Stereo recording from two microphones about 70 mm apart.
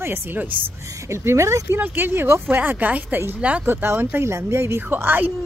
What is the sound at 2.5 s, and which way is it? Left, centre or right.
Speech, right.